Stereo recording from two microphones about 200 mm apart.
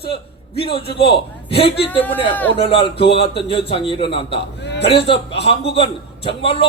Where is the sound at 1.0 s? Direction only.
30° left (ahead or behind).